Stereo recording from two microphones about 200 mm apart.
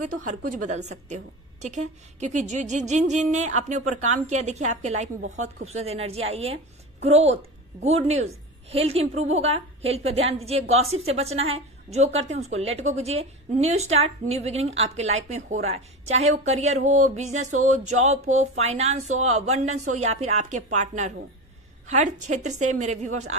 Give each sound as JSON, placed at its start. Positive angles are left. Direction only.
{"t": 0.1, "sound": "a woman's voice", "side_deg": -40}